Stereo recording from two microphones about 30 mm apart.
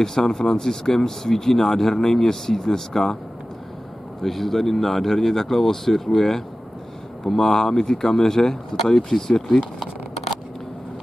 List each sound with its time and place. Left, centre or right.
0.0 s speech: centre
4.2 s speech: centre